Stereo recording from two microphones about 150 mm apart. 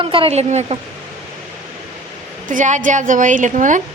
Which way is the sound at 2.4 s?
55° right (ahead or behind).